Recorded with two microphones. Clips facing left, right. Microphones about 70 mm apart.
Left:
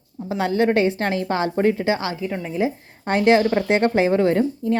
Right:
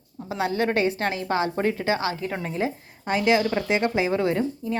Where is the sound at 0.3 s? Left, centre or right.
Left.